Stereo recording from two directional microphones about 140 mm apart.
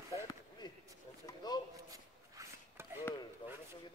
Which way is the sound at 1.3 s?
30° left (ahead or behind).